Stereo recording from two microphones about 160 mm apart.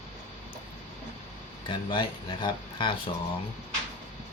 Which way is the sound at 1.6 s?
30° left (ahead or behind).